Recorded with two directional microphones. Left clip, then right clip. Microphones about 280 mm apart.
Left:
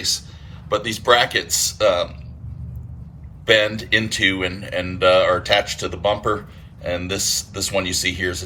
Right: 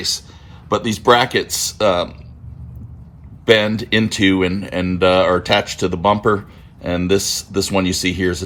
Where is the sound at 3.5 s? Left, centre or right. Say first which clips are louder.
Right 2 dB; right.